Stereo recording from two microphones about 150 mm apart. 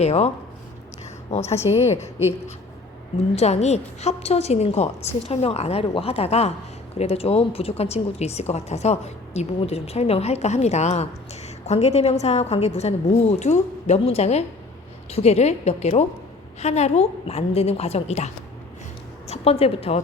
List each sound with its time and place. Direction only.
0.0 s speech: 45° left (ahead or behind)
1.7 s a woman's voice: 30° left (ahead or behind)
3.3 s speech: 45° left (ahead or behind)
19.3 s a woman's voice: 45° left (ahead or behind)